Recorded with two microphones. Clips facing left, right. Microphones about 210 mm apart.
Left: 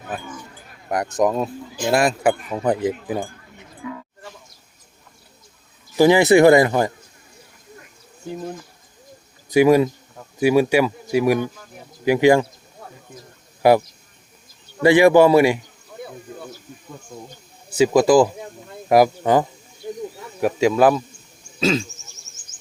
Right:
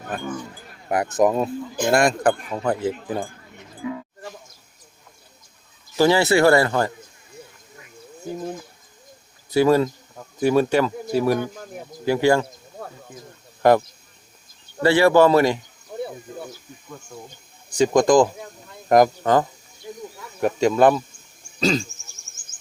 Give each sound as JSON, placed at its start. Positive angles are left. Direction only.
{"t": 0.1, "sound": "speech", "side_deg": 5}
{"t": 3.8, "sound": "a sound", "side_deg": -25}
{"t": 6.0, "sound": "speech", "side_deg": 15}
{"t": 9.5, "sound": "speech", "side_deg": 15}
{"t": 13.6, "sound": "speech", "side_deg": 10}
{"t": 17.7, "sound": "speech", "side_deg": 5}